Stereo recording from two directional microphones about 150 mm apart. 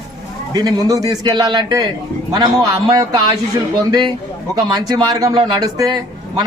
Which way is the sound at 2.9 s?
25° right (ahead or behind).